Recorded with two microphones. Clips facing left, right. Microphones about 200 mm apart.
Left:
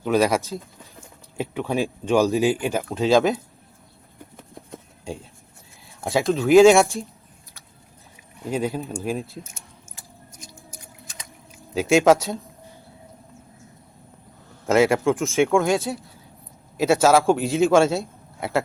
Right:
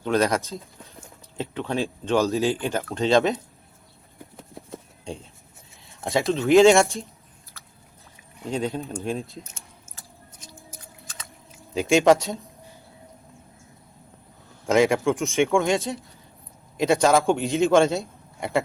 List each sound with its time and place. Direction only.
0.0 s a man's voice: 5° left (ahead or behind)
4.5 s a sound: centre (ahead or behind)
5.9 s a man's voice: centre (ahead or behind)
8.4 s speech: 5° left (ahead or behind)
10.7 s a sound: 15° left (ahead or behind)
11.7 s a man's voice: centre (ahead or behind)
14.7 s a man's voice: centre (ahead or behind)